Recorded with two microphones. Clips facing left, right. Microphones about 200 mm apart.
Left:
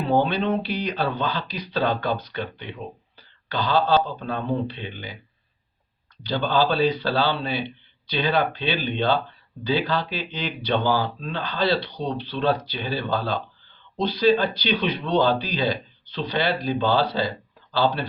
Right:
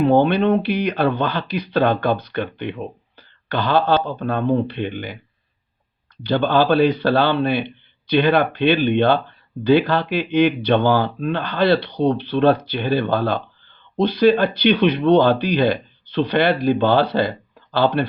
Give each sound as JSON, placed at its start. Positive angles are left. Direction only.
{"t": 0.0, "sound": "speech", "side_deg": -60}
{"t": 6.2, "sound": "speech", "side_deg": -60}